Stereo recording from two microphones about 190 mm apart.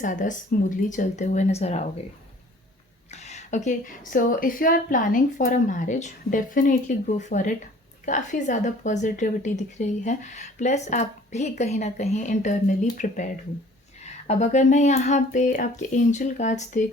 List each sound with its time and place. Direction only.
0.0 s speech: 40° left (ahead or behind)
3.1 s a woman's voice: 35° left (ahead or behind)